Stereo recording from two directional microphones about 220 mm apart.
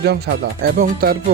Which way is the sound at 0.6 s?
45° right (ahead or behind).